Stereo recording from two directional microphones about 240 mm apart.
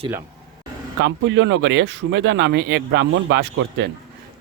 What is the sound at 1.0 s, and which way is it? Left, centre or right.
Speech, right.